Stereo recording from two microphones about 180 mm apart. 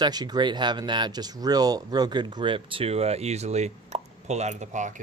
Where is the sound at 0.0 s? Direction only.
25° right (ahead or behind).